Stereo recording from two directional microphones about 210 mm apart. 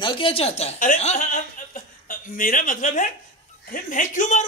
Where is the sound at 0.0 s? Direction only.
25° left (ahead or behind).